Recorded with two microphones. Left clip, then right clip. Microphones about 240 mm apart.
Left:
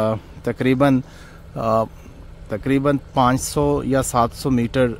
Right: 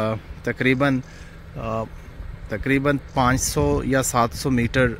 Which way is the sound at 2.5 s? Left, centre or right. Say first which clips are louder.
Left 2 dB; centre.